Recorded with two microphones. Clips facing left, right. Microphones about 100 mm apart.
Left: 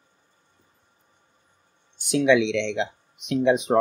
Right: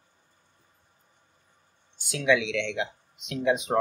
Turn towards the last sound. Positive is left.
turn(degrees=25)  # may be behind; listen again after turning